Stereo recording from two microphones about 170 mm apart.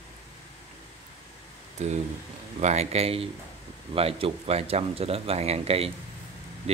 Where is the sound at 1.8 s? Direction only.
40° right (ahead or behind).